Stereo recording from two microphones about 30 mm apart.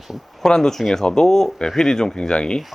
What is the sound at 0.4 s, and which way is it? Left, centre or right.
Speech, left.